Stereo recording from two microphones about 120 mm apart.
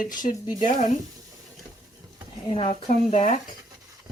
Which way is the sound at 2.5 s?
50° left (ahead or behind).